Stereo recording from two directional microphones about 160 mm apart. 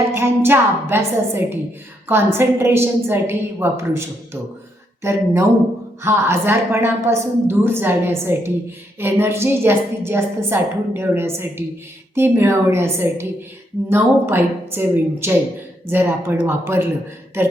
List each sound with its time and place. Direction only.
0.1 s a woman's voice: 15° right (ahead or behind)